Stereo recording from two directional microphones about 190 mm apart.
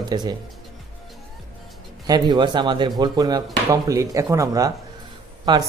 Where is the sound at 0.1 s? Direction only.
20° right (ahead or behind).